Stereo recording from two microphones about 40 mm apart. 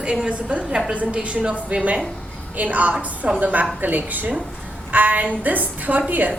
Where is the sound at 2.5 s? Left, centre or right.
Right.